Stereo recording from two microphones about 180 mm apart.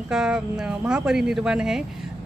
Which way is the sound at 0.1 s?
5° right (ahead or behind).